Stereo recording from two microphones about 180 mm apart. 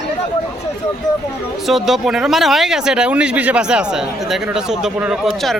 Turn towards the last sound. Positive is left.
turn(degrees=-5)  # may be behind; listen again after turning